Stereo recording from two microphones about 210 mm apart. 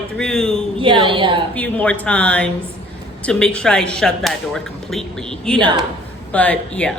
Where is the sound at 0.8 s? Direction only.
25° right (ahead or behind).